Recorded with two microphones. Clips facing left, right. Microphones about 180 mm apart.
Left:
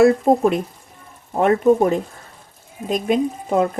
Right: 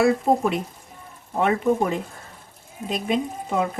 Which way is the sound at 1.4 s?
40° left (ahead or behind).